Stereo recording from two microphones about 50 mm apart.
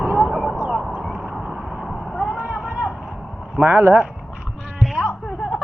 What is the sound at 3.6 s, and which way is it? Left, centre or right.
Speech, right.